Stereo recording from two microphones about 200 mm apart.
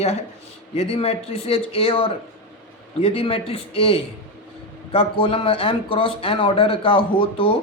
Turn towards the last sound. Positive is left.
turn(degrees=25)  # may be behind; listen again after turning